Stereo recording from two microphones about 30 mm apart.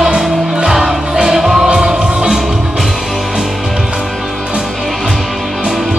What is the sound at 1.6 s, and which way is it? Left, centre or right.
Music, right.